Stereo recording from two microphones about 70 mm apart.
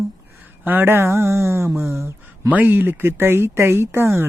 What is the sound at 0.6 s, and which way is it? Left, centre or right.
Speech, right.